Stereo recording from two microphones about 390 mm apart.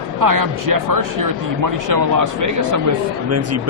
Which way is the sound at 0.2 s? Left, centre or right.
Right.